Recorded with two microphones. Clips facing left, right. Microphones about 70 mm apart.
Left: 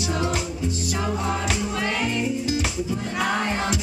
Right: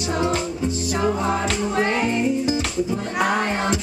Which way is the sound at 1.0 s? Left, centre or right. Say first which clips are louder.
Right 5 dB; right.